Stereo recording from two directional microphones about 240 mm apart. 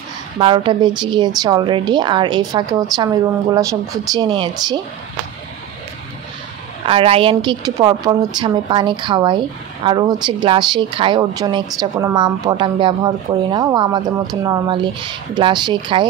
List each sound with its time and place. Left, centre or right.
0.4 s a woman's voice: right
6.9 s a woman's voice: right